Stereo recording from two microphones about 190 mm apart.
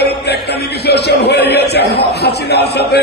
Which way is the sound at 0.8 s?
60° left (ahead or behind).